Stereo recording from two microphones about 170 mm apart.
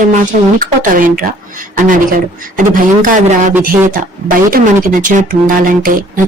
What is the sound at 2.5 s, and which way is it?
Speech, 50° right (ahead or behind).